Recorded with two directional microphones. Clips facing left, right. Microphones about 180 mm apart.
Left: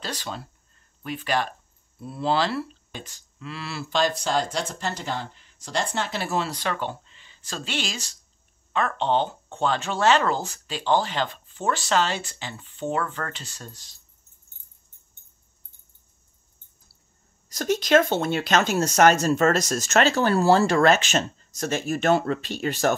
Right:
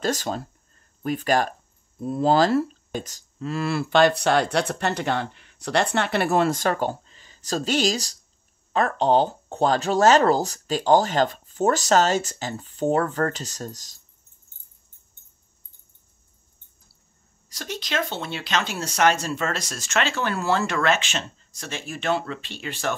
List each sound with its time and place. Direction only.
0.0 s speech: 45° right (ahead or behind)
17.5 s speech: 45° left (ahead or behind)